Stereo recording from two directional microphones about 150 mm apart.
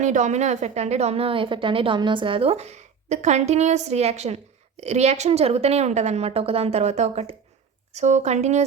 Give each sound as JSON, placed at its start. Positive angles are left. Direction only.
{"t": 0.0, "sound": "a woman's voice", "side_deg": -55}